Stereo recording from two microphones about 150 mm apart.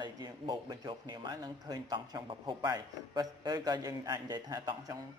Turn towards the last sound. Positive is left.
turn(degrees=-25)  # may be behind; listen again after turning